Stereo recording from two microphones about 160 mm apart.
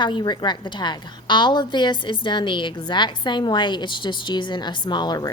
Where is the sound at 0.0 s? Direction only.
30° left (ahead or behind).